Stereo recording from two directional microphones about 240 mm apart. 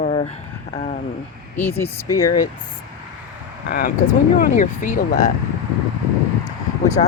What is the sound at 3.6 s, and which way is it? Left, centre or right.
Speech, left.